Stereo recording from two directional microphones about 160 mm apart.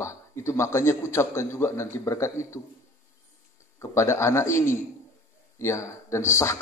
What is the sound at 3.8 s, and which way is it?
A man's voice, 15° left (ahead or behind).